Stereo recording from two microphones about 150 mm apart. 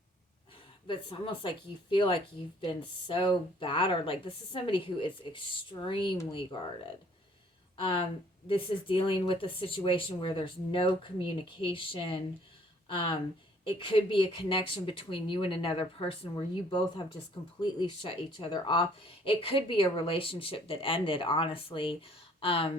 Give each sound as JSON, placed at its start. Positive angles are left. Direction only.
{"t": 0.9, "sound": "speech", "side_deg": 35}
{"t": 7.8, "sound": "speech", "side_deg": 35}